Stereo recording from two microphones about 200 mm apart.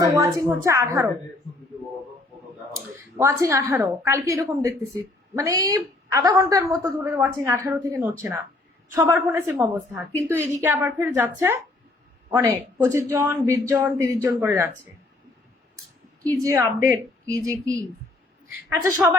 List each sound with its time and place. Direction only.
0.0 s a woman's voice: 15° right (ahead or behind)
2.7 s a woman's voice: 15° right (ahead or behind)
16.4 s a woman's voice: 15° right (ahead or behind)
18.8 s a woman's voice: 15° right (ahead or behind)